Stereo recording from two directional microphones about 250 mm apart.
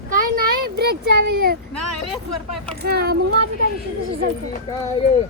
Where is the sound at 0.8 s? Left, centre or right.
Right.